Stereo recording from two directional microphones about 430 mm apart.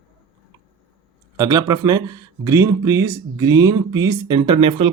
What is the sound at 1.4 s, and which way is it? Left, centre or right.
Speech, centre.